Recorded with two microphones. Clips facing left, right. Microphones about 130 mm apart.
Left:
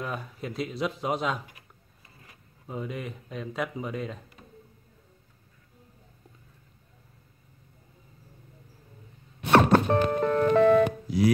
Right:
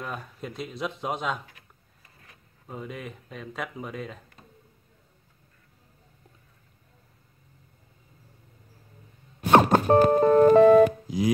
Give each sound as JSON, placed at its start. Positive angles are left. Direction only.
{"t": 0.0, "sound": "speech", "side_deg": 0}
{"t": 9.5, "sound": "music", "side_deg": -15}
{"t": 9.8, "sound": "music", "side_deg": -40}
{"t": 11.1, "sound": "music", "side_deg": -15}